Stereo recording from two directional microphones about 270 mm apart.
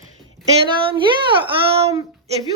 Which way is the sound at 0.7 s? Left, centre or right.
Centre.